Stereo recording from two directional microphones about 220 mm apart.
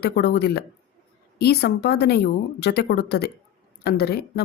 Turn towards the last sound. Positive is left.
turn(degrees=45)  # may be behind; listen again after turning